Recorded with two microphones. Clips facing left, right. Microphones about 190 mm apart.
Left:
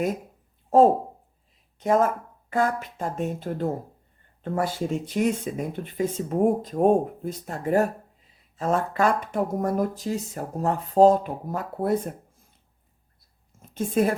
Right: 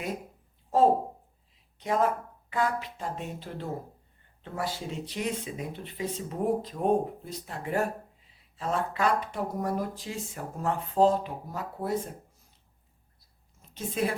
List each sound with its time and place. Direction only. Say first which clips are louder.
1.8 s speech: left 5 dB; 45° left (ahead or behind)
13.6 s a woman's voice: left 7 dB; 50° left (ahead or behind)